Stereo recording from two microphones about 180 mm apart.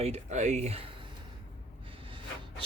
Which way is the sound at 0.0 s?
40° right (ahead or behind).